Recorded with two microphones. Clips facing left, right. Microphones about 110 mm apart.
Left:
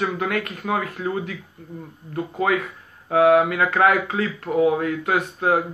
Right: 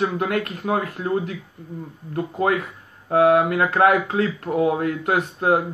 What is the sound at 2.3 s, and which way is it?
Speech, 35° right (ahead or behind).